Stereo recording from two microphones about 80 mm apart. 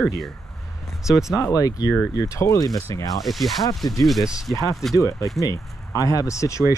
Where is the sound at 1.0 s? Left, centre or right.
Centre.